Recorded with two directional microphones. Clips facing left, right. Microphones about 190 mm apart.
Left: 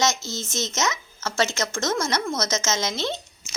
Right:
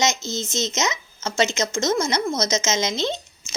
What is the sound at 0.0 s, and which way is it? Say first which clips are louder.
Speech: right 1 dB; 20° right (ahead or behind).